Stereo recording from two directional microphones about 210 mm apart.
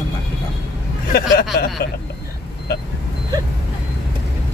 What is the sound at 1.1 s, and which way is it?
Speech, 45° left (ahead or behind).